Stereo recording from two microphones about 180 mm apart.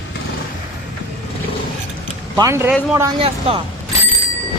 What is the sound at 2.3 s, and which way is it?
Speech, 15° right (ahead or behind).